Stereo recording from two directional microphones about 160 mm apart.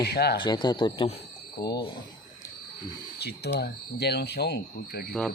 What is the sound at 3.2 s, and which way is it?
Speech, 90° left.